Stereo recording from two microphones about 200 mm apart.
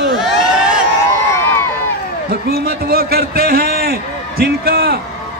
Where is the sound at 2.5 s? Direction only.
50° right (ahead or behind).